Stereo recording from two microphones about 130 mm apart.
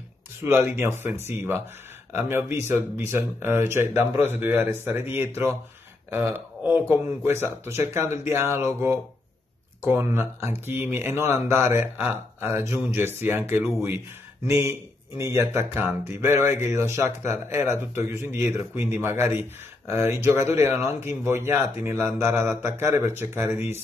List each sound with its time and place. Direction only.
0.4 s speech: 20° right (ahead or behind)